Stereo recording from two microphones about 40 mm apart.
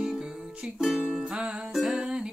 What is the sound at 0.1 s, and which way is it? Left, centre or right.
Music, centre.